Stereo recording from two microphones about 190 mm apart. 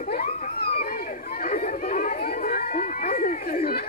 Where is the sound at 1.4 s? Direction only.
40° left (ahead or behind).